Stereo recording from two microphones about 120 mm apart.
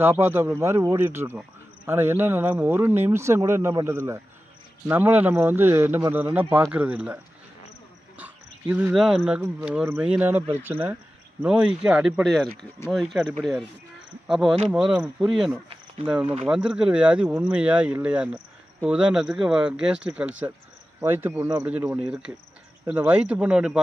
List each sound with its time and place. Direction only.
0.0 s a man's voice: 20° right (ahead or behind)
8.2 s cricket: 15° right (ahead or behind)
8.9 s speech: 5° right (ahead or behind)
16.1 s a man's voice: 15° right (ahead or behind)